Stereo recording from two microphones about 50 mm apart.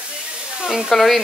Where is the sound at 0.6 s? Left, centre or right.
Centre.